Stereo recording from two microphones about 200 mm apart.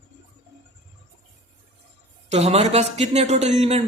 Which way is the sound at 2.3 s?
30° right (ahead or behind).